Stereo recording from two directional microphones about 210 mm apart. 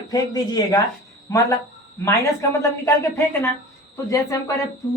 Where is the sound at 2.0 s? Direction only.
10° left (ahead or behind).